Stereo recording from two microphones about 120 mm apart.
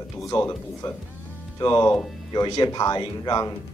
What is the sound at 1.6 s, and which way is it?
Speech, 40° left (ahead or behind).